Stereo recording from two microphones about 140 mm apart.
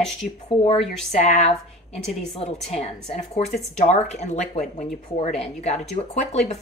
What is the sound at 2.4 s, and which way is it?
A woman's voice, 50° left (ahead or behind).